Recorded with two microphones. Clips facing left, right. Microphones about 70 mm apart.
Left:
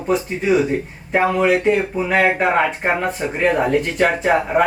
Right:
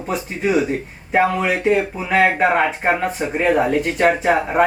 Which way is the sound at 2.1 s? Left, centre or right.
Centre.